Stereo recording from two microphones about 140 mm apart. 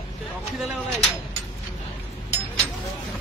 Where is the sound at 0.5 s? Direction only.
Centre (ahead or behind).